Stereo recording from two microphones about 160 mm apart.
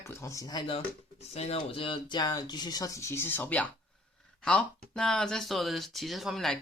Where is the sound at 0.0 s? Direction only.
15° left (ahead or behind).